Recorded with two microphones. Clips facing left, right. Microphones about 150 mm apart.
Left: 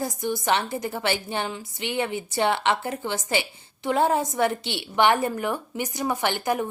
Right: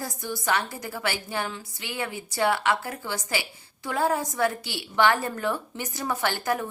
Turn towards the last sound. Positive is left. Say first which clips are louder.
# left 2 dB
turn(degrees=20)  # may be behind; listen again after turning